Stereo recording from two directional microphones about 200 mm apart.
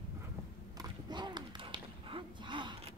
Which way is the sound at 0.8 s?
20° right (ahead or behind).